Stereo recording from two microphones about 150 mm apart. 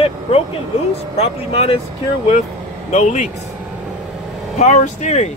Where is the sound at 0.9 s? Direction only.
40° left (ahead or behind).